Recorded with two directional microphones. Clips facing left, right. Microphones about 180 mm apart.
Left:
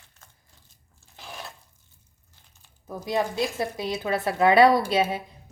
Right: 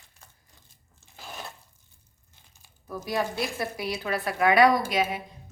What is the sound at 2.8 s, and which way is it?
A woman's voice, 20° left (ahead or behind).